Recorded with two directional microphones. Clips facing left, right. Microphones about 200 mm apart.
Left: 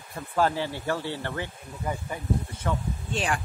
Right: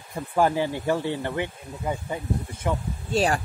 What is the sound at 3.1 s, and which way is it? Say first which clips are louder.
Speech: right 7 dB; 40° right (ahead or behind).